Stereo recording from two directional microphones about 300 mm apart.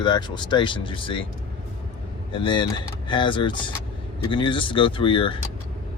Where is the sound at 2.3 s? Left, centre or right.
Centre.